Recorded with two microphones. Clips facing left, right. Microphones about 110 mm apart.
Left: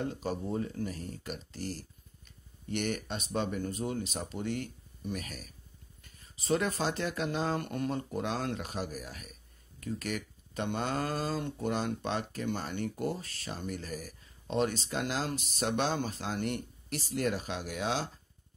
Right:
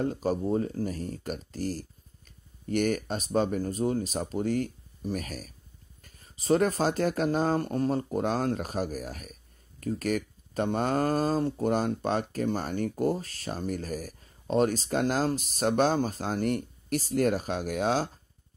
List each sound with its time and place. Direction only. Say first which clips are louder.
0.0 s speech: right 7 dB; 40° right (ahead or behind)